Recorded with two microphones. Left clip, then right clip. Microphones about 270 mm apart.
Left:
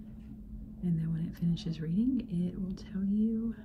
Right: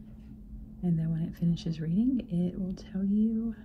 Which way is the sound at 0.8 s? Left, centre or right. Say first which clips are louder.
Right 3 dB; centre.